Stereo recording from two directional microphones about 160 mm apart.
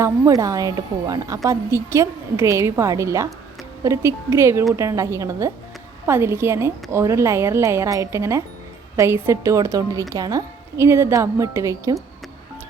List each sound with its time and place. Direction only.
0.0 s a woman's voice: 20° right (ahead or behind)